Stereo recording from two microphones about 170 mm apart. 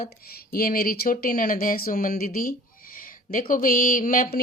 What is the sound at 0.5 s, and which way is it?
Speech, 60° left (ahead or behind).